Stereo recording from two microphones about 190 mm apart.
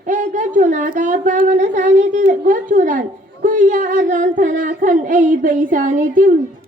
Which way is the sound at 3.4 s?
45° right (ahead or behind).